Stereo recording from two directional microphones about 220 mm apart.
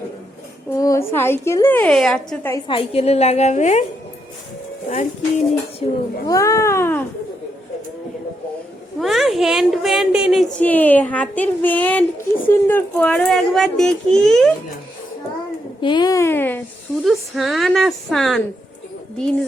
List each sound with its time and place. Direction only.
0.8 s a woman's voice: 15° left (ahead or behind)
2.6 s a woman's voice: 25° left (ahead or behind)
5.8 s a woman's voice: 15° left (ahead or behind)
9.0 s a woman's voice: centre (ahead or behind)
10.6 s a woman's voice: 10° left (ahead or behind)
15.8 s a woman's voice: 20° left (ahead or behind); by 18.4 s centre (ahead or behind)